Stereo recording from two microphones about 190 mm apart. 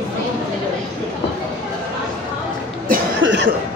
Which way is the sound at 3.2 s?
80° right.